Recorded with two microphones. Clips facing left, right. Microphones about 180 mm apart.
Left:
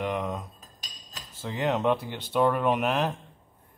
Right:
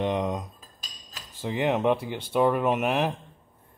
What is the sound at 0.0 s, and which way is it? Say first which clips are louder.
Cutlery: right 3 dB; 20° right (ahead or behind).